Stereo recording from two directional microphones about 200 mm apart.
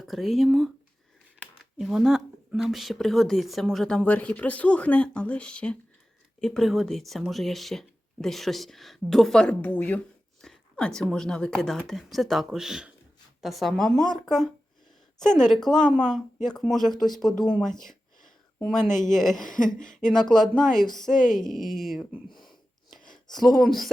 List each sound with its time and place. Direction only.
0.0 s speech: centre (ahead or behind)
1.8 s speech: centre (ahead or behind)
15.2 s speech: centre (ahead or behind)
18.2 s a sound: centre (ahead or behind)
18.9 s speech: 40° left (ahead or behind)
19.1 s speech: centre (ahead or behind)
19.4 s speech: 40° left (ahead or behind)
19.9 s speech: 5° left (ahead or behind)
23.3 s speech: centre (ahead or behind)